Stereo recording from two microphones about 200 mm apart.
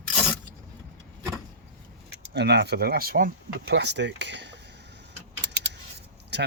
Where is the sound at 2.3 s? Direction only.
55° right (ahead or behind).